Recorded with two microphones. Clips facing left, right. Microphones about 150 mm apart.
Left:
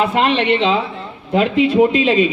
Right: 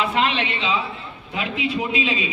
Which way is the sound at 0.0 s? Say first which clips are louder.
Left 6 dB; 50° left (ahead or behind).